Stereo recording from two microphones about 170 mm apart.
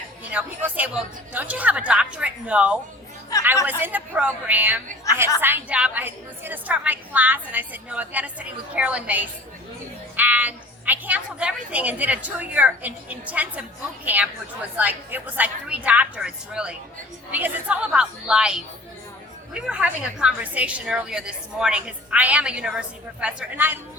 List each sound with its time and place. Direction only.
0.3 s a woman's voice: 10° right (ahead or behind)